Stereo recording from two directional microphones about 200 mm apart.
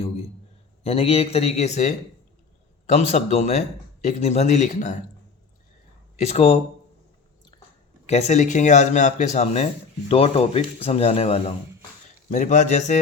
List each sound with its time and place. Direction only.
0.9 s speech: 30° left (ahead or behind)
6.1 s speech: 30° left (ahead or behind)
8.0 s speech: 35° left (ahead or behind)